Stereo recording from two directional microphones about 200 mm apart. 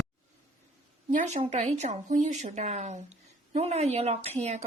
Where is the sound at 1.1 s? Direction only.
35° right (ahead or behind).